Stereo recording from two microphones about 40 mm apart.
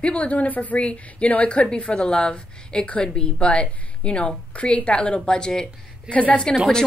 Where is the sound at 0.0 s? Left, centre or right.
Left; by 5.7 s centre.